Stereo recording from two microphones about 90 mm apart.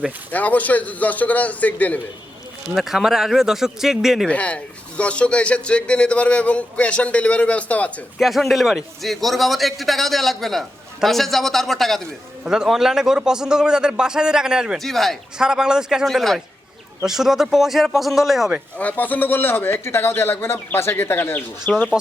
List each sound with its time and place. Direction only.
0.3 s speech: 15° left (ahead or behind)
2.7 s a man's voice: 5° right (ahead or behind)
4.3 s speech: 15° left (ahead or behind)
8.2 s a man's voice: centre (ahead or behind)
14.8 s a man's voice: 5° left (ahead or behind)
16.0 s a man's voice: 5° left (ahead or behind)
18.8 s speech: 20° left (ahead or behind)